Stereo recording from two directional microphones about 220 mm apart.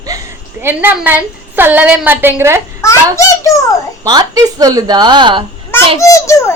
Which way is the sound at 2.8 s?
10° left (ahead or behind).